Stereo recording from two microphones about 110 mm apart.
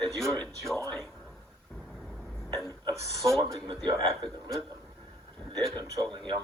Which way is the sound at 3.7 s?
45° right (ahead or behind).